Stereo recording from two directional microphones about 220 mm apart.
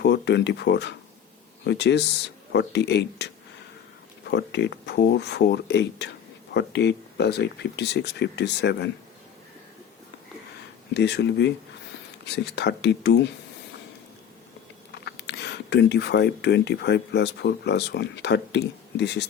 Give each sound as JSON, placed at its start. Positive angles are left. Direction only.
{"t": 0.0, "sound": "speech", "side_deg": 50}
{"t": 10.9, "sound": "speech", "side_deg": 50}
{"t": 15.0, "sound": "speech", "side_deg": 50}